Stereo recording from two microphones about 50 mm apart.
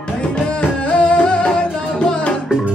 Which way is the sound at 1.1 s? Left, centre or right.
Centre.